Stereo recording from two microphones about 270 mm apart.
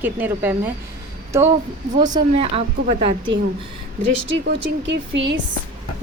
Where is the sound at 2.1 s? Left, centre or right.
Right.